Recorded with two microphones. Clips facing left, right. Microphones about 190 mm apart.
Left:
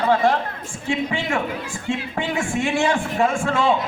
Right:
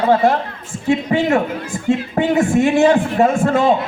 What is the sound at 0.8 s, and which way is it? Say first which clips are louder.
A man's voice: right 8 dB; 40° right (ahead or behind).